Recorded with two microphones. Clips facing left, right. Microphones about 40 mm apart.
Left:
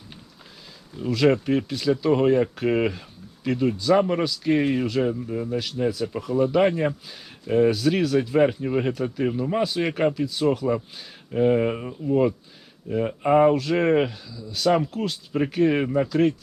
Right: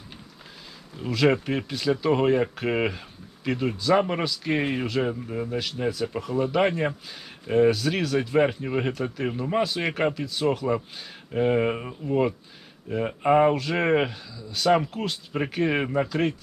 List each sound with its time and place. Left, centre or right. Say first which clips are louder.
0.9 s speech: left 2 dB; centre